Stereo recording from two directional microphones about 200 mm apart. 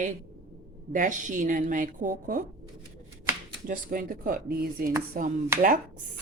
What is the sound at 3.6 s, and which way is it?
Speech, 45° right (ahead or behind).